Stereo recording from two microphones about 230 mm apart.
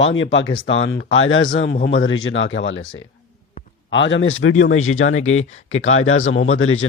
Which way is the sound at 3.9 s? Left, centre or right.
Left.